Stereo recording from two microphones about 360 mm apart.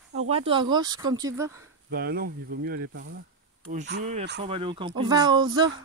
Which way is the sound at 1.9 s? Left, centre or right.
Right.